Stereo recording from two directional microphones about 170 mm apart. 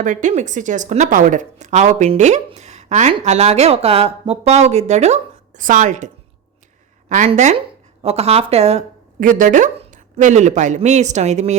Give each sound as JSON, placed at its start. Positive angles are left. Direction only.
{"t": 0.0, "sound": "a woman's voice", "side_deg": -50}
{"t": 7.1, "sound": "a woman's voice", "side_deg": -45}
{"t": 9.2, "sound": "a woman's voice", "side_deg": -50}